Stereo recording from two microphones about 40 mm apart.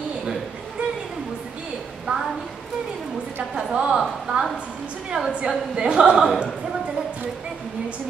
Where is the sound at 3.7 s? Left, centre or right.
Centre.